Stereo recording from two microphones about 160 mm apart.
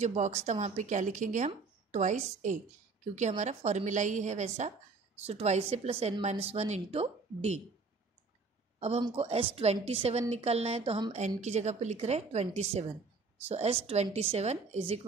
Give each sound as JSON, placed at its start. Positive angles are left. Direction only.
{"t": 0.0, "sound": "a woman's voice", "side_deg": -45}
{"t": 8.7, "sound": "a sound", "side_deg": -40}
{"t": 9.1, "sound": "a woman's voice", "side_deg": -40}